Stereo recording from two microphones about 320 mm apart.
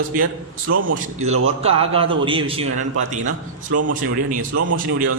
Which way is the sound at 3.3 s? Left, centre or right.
Right.